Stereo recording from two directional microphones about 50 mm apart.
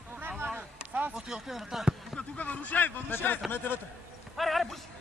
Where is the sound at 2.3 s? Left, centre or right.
Left.